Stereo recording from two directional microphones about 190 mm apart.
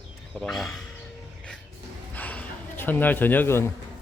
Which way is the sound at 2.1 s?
10° left (ahead or behind).